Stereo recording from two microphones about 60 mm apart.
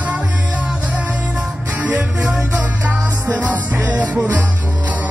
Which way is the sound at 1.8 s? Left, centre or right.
Right.